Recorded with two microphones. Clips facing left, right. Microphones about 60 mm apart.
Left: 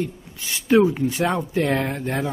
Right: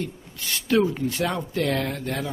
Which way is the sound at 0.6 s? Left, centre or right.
Centre.